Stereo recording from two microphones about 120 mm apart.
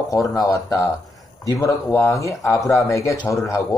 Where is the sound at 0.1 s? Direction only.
30° left (ahead or behind).